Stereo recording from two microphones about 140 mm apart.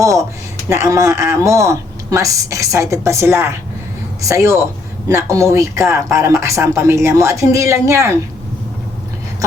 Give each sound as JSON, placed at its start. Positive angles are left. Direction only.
{"t": 0.0, "sound": "speech", "side_deg": -20}